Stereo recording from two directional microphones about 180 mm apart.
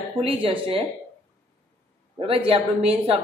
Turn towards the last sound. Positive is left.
turn(degrees=-35)  # may be behind; listen again after turning